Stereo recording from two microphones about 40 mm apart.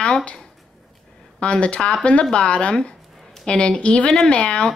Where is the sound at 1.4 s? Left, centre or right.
Left.